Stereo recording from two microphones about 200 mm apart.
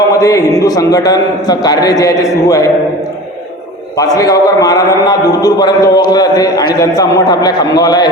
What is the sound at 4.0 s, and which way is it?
A man's voice, 20° left (ahead or behind).